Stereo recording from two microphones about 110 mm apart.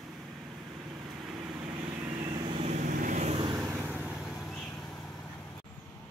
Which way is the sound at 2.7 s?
90° right.